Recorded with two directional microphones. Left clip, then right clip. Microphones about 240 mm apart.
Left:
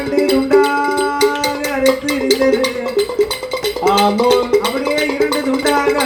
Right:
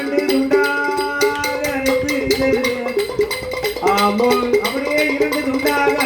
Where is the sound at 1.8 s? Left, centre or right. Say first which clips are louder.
Left 5 dB; left.